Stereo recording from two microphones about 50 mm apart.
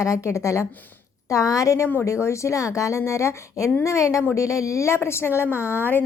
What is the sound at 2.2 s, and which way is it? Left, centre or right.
A woman's voice, left.